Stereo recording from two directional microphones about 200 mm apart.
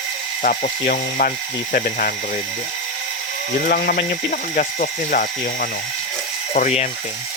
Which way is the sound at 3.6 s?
45° left (ahead or behind).